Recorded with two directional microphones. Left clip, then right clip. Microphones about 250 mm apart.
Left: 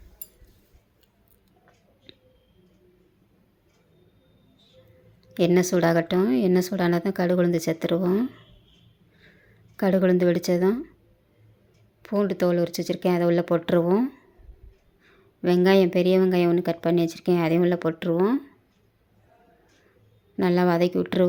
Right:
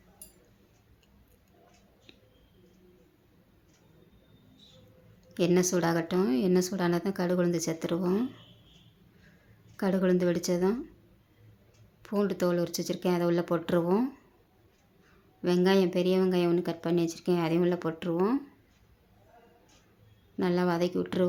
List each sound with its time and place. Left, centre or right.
2.1 s a sound: centre
5.3 s speech: centre
9.7 s speech: centre
12.0 s speech: centre
20.3 s a woman's voice: centre